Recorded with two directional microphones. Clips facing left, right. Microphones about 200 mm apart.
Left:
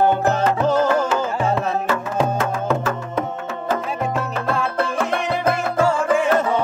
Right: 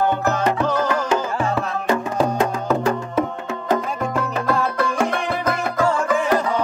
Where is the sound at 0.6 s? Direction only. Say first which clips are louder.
Left 3 dB; 25° left (ahead or behind).